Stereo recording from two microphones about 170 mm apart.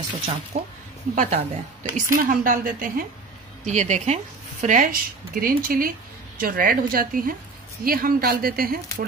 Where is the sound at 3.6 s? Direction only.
45° right (ahead or behind); by 8.7 s 60° right (ahead or behind).